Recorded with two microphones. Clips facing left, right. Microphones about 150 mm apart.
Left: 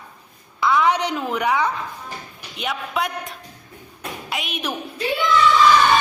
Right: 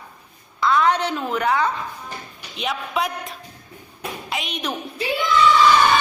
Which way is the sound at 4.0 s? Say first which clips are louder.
Right 1 dB; centre (ahead or behind).